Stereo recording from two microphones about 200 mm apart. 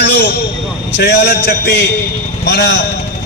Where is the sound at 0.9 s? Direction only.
55° left (ahead or behind).